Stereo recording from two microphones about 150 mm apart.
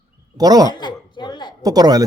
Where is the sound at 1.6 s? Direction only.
25° right (ahead or behind).